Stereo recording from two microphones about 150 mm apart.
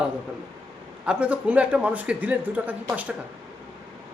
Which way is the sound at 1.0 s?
10° right (ahead or behind).